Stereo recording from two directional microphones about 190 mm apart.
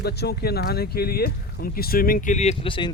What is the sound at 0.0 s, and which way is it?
Speech, 60° left (ahead or behind).